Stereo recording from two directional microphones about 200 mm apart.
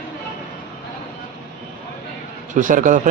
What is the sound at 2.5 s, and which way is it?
Speech, 40° right (ahead or behind).